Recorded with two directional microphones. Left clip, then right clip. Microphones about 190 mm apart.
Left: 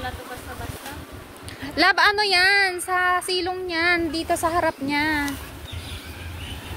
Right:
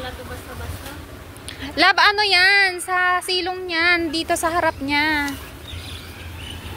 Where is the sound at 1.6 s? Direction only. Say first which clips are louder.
Right 3 dB; 15° left (ahead or behind).